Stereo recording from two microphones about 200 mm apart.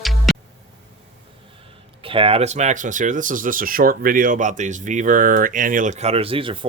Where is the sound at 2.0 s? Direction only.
25° right (ahead or behind).